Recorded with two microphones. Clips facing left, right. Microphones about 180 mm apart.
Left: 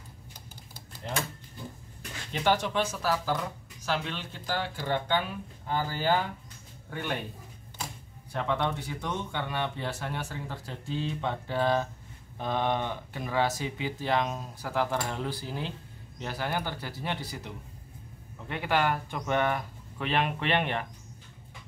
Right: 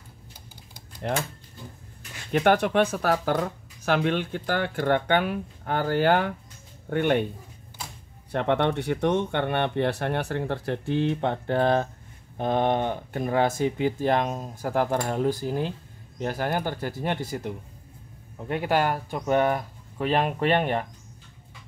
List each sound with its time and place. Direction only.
2.3 s speech: 60° right (ahead or behind)
8.3 s speech: 65° right (ahead or behind); by 20.8 s 40° right (ahead or behind)